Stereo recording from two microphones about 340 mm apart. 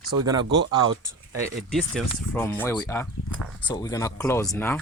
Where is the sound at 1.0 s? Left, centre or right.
Centre.